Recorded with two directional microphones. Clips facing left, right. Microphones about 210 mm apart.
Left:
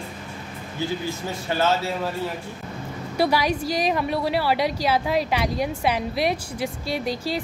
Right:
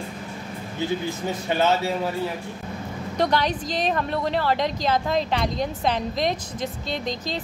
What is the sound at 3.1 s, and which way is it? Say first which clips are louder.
A woman's voice: left 1 dB; 10° left (ahead or behind).